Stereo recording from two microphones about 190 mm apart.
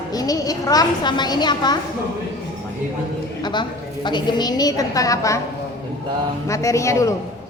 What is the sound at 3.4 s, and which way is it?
A woman's voice, 25° left (ahead or behind).